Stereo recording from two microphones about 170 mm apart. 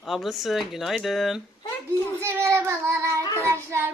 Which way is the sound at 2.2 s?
15° right (ahead or behind).